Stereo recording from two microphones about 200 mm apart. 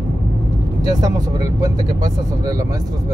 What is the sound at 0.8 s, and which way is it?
Speech, 20° right (ahead or behind).